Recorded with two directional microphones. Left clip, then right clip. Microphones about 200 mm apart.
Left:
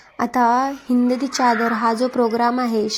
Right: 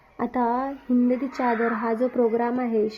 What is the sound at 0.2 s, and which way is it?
A woman's voice, 25° left (ahead or behind).